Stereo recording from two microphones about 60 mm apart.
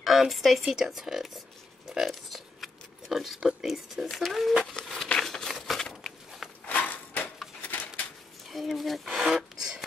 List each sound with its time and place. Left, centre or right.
0.0 s speech: centre
1.9 s a sound: centre
4.1 s speech: centre
4.7 s crumpling: centre
6.7 s a sound: left
8.5 s speech: centre